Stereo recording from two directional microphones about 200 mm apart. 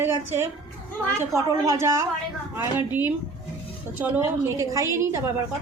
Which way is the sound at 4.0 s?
10° right (ahead or behind).